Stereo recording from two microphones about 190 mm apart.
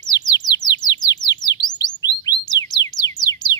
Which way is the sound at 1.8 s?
20° left (ahead or behind).